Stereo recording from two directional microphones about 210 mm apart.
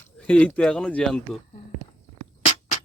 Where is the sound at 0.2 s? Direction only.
5° left (ahead or behind).